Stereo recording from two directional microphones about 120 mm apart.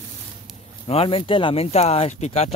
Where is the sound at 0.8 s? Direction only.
55° left (ahead or behind).